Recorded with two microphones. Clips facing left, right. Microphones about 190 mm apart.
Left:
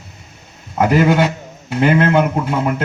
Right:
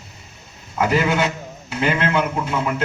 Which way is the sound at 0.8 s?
55° left (ahead or behind).